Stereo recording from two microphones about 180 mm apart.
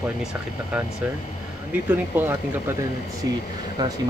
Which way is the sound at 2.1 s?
10° right (ahead or behind).